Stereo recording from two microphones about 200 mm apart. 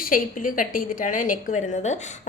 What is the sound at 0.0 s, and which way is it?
A woman's voice, 45° left (ahead or behind).